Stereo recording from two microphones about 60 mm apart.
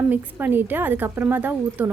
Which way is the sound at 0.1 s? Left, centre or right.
Right.